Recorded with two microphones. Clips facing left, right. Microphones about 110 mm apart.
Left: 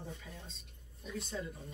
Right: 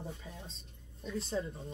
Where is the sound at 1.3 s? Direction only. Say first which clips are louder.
Right 6 dB; 35° right (ahead or behind).